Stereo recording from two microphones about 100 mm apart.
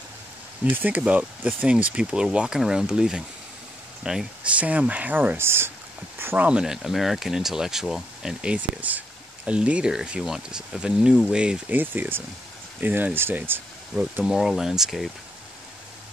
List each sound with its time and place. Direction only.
0.7 s speech: 20° right (ahead or behind)
14.3 s speech: 5° right (ahead or behind)